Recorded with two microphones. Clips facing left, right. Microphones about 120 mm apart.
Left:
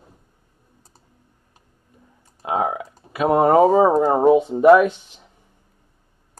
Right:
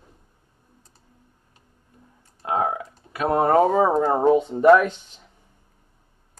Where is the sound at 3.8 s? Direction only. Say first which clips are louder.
Left 4 dB; 15° left (ahead or behind).